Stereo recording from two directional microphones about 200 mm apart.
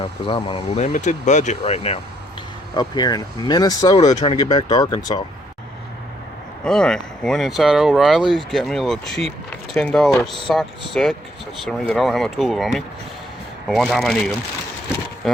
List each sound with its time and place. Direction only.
0.0 s speech: 25° left (ahead or behind)
0.9 s speech: 35° left (ahead or behind)
2.7 s speech: 20° left (ahead or behind)
6.7 s speech: 5° left (ahead or behind)
9.5 s a sound: 5° left (ahead or behind)
10.5 s speech: centre (ahead or behind)